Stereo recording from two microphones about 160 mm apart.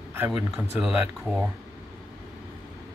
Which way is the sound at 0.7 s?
5° right (ahead or behind).